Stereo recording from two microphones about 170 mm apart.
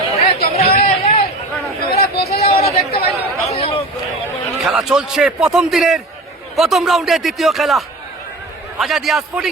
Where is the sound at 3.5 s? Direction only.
35° left (ahead or behind).